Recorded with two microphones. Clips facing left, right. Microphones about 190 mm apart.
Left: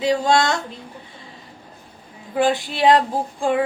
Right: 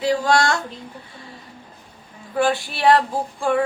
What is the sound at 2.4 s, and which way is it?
Female singing, 15° left (ahead or behind).